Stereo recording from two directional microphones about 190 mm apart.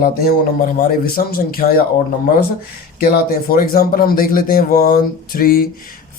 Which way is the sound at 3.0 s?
50° left (ahead or behind).